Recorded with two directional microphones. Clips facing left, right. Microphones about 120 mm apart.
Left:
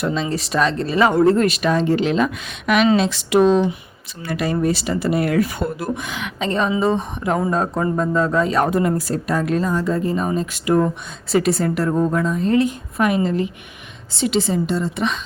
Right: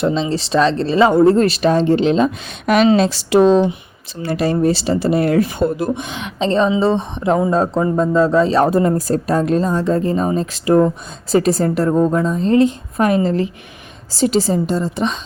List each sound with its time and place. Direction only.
0.0 s a woman's voice: 25° right (ahead or behind)